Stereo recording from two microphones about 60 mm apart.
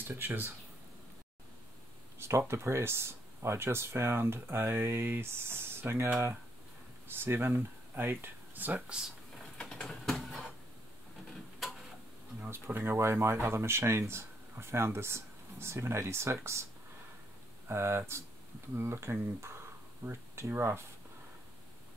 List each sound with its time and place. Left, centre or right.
0.1 s speech: right
2.1 s speech: right
7.2 s speech: right
9.6 s a sound: centre
12.4 s speech: right
13.0 s speech: right
17.6 s speech: right